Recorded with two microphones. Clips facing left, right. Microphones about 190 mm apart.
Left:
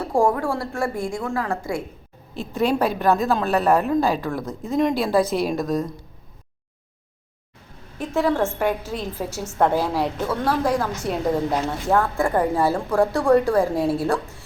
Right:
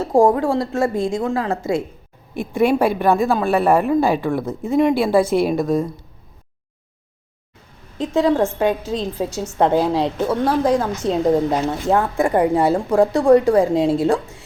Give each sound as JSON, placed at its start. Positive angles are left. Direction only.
{"t": 0.0, "sound": "a woman's voice", "side_deg": -20}
{"t": 5.2, "sound": "a woman's voice", "side_deg": -55}
{"t": 5.5, "sound": "speech", "side_deg": -10}
{"t": 7.9, "sound": "a woman's voice", "side_deg": -20}